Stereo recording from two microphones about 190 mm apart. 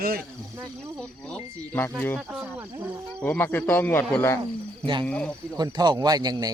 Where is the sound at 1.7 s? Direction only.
10° left (ahead or behind).